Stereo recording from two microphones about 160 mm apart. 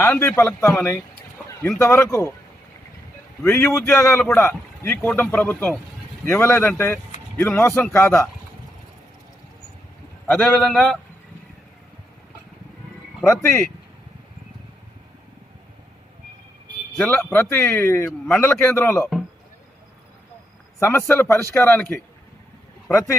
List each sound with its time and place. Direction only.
0.0 s a man's voice: 15° left (ahead or behind)
3.4 s a man's voice: 15° left (ahead or behind)
10.2 s a man's voice: 5° left (ahead or behind)
13.2 s a man's voice: 15° left (ahead or behind)
17.0 s a man's voice: 5° left (ahead or behind)
20.7 s a man's voice: 15° left (ahead or behind)